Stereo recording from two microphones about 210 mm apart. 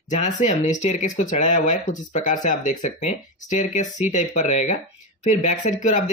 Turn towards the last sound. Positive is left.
turn(degrees=35)  # may be behind; listen again after turning